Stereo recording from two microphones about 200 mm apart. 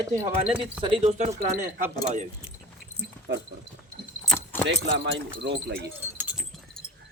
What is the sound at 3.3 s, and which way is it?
Speech, 60° right (ahead or behind).